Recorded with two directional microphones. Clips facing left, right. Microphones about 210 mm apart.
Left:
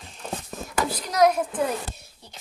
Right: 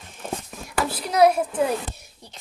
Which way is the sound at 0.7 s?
10° right (ahead or behind).